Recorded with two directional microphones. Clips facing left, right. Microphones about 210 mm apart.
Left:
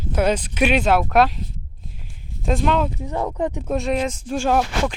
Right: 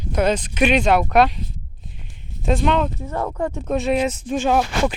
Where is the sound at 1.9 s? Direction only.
Centre (ahead or behind).